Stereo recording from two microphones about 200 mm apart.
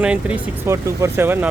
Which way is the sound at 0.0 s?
5° right (ahead or behind).